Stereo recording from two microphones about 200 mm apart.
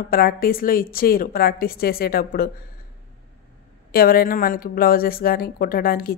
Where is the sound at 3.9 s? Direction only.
50° left (ahead or behind).